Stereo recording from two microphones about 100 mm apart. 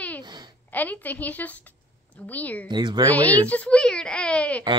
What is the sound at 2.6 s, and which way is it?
Speech, 50° right (ahead or behind).